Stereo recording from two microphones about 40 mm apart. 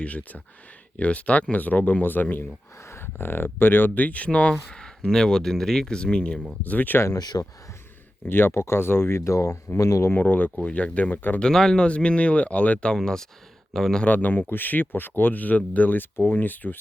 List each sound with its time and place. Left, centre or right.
0.0 s speech: left
2.8 s speech: left
4.7 s speech: centre
6.0 s speech: left
6.6 s speech: left
8.2 s speech: left
9.7 s speech: left
10.2 s speech: left
10.6 s speech: left
11.1 s speech: left
11.3 s speech: centre
11.9 s speech: left
13.7 s speech: centre
14.0 s speech: left